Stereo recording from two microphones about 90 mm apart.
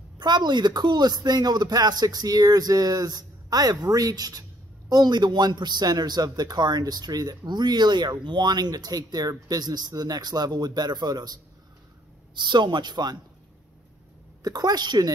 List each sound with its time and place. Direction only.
0.2 s a man's voice: 55° right (ahead or behind)
12.4 s speech: 60° right (ahead or behind)
14.4 s a man's voice: 45° right (ahead or behind)